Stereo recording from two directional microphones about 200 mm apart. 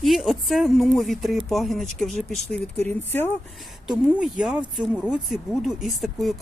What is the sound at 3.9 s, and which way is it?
Speech, 5° right (ahead or behind).